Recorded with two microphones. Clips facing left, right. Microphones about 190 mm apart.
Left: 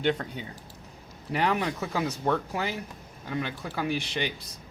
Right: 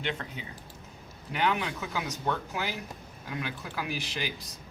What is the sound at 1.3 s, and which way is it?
Speech, 35° left (ahead or behind).